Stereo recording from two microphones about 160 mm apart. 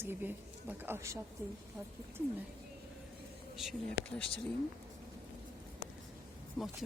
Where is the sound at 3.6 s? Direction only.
Centre (ahead or behind).